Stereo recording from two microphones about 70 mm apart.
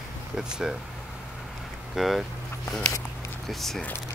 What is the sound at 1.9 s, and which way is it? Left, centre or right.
Speech, centre.